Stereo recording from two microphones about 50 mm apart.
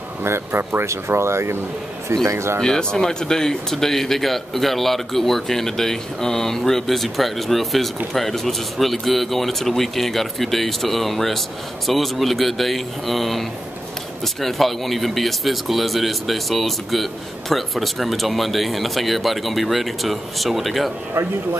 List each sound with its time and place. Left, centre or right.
0.2 s speech: right
2.6 s speech: centre